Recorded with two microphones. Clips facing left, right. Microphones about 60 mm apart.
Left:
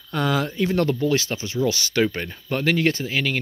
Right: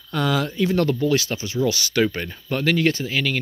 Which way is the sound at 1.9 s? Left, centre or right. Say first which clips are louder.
Right 1 dB; left.